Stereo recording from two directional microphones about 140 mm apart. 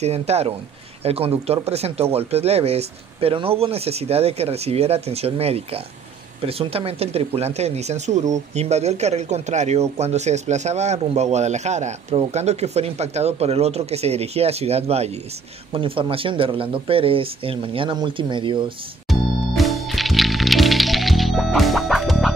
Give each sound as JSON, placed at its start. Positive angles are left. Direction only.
{"t": 0.0, "sound": "speech", "side_deg": -50}
{"t": 19.0, "sound": "music", "side_deg": 0}